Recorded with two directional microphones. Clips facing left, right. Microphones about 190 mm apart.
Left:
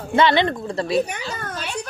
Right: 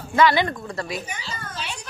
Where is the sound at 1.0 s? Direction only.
60° left (ahead or behind).